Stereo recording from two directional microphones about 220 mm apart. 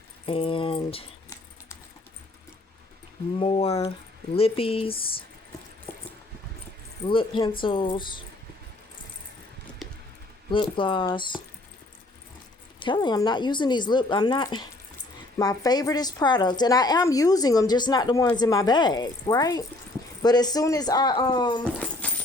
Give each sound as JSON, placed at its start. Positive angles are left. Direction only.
{"t": 0.3, "sound": "speech", "side_deg": 25}
{"t": 3.3, "sound": "speech", "side_deg": 25}
{"t": 7.1, "sound": "speech", "side_deg": 20}
{"t": 9.8, "sound": "squish", "side_deg": 0}
{"t": 10.5, "sound": "speech", "side_deg": 25}
{"t": 12.8, "sound": "a woman's voice", "side_deg": 20}
{"t": 21.6, "sound": "speech", "side_deg": 5}